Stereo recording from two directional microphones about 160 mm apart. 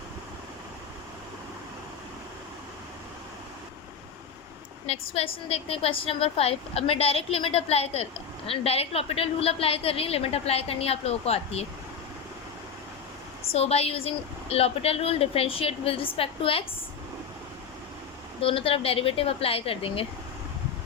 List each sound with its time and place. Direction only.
4.9 s speech: 40° left (ahead or behind)
13.5 s speech: 40° left (ahead or behind)
18.3 s speech: 35° left (ahead or behind)